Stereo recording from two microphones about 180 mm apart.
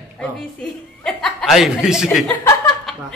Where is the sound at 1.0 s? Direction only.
Centre (ahead or behind).